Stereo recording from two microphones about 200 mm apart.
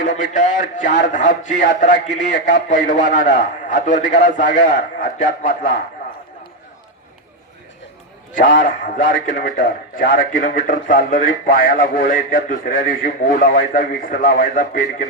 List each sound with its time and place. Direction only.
0.0 s a man's voice: 40° left (ahead or behind)
8.4 s a man's voice: 40° left (ahead or behind)